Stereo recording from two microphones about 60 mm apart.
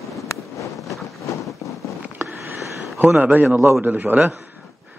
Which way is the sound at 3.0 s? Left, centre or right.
Right.